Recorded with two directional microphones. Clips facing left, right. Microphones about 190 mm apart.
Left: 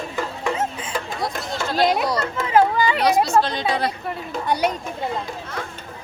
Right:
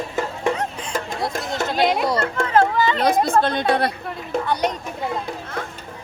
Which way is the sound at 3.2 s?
55° right (ahead or behind).